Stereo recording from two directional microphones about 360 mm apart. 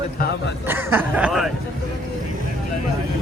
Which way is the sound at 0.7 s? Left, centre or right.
Centre.